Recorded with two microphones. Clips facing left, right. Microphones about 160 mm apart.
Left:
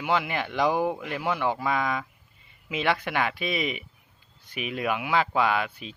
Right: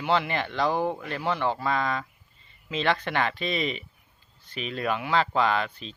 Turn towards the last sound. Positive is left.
turn(degrees=10)  # may be behind; listen again after turning